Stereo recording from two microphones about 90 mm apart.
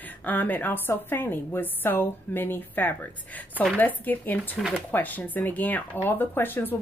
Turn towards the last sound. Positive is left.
turn(degrees=25)  # may be behind; listen again after turning